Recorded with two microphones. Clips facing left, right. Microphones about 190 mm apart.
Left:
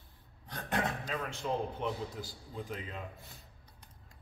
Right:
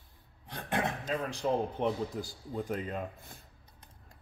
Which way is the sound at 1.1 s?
35° right (ahead or behind).